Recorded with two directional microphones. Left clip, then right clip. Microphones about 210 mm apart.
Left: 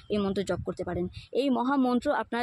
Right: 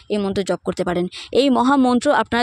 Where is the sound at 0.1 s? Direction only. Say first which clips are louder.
Right 8 dB; 30° right (ahead or behind).